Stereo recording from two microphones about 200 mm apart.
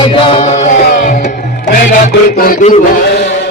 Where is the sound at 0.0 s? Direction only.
25° left (ahead or behind).